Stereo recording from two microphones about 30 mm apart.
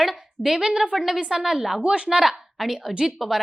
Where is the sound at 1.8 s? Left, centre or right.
Right.